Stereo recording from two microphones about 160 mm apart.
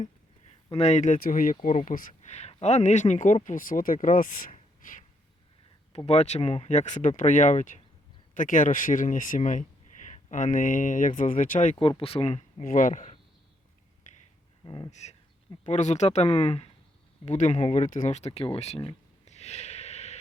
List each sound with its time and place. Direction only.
0.8 s speech: 45° left (ahead or behind)
4.5 s a sound: 55° left (ahead or behind)
6.1 s speech: 45° left (ahead or behind)
11.8 s speech: 35° left (ahead or behind)
12.6 s speech: 55° left (ahead or behind)
14.6 s speech: 30° left (ahead or behind)
14.8 s speech: 45° left (ahead or behind)
19.2 s a sound: 45° left (ahead or behind)